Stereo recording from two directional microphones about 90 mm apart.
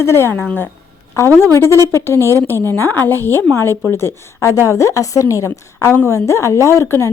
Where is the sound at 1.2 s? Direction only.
35° left (ahead or behind).